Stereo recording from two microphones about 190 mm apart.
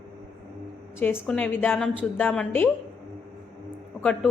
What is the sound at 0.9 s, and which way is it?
A woman's voice, 10° left (ahead or behind).